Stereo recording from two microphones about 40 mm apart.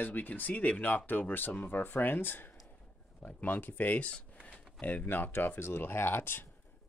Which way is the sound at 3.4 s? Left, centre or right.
Left.